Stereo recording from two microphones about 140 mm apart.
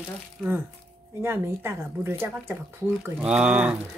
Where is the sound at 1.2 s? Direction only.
15° right (ahead or behind).